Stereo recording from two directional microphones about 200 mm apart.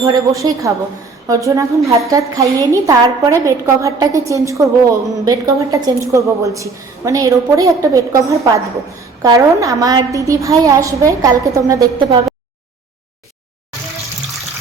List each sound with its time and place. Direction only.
0.0 s a woman's voice: 15° right (ahead or behind)